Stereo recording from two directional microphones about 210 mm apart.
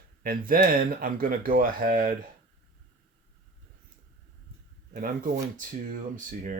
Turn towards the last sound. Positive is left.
turn(degrees=-40)  # may be behind; listen again after turning